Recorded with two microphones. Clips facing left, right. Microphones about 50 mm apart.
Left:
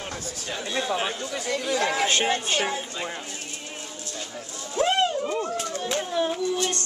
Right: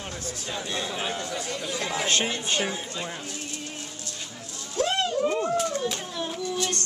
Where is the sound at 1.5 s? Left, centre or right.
Left.